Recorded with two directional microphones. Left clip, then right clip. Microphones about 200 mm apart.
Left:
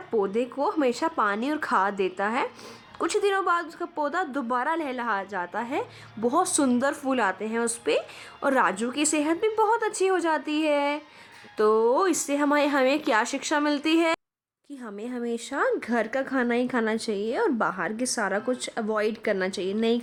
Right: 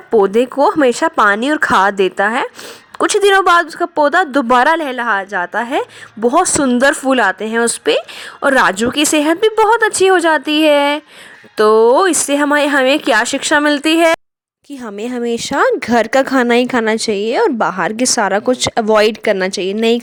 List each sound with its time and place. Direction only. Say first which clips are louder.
0.1 s speech: right 14 dB; 35° right (ahead or behind)
14.8 s speech: right 13 dB; 45° right (ahead or behind)